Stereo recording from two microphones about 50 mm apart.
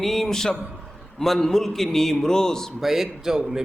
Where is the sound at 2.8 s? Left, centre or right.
Centre.